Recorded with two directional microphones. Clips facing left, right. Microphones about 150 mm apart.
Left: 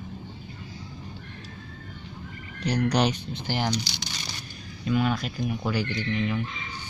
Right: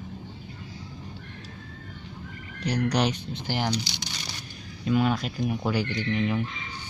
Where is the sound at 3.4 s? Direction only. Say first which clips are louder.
Even; 10° right (ahead or behind).